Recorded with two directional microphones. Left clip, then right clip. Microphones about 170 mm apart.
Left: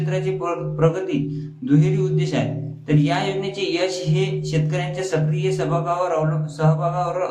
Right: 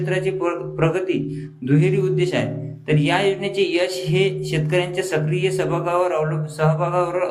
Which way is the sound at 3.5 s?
15° right (ahead or behind).